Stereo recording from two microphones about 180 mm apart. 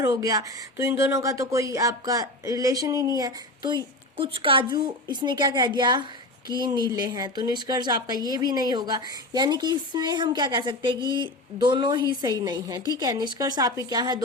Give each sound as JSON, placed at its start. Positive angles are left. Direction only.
{"t": 0.0, "sound": "speech", "side_deg": -15}